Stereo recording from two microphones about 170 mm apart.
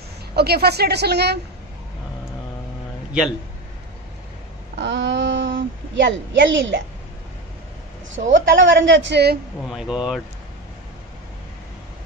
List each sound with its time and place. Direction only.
0.4 s a woman's voice: 70° right (ahead or behind)
3.1 s a man's voice: centre (ahead or behind)
4.7 s a woman's voice: 90° right
8.1 s a woman's voice: 90° right
9.6 s speech: 5° right (ahead or behind)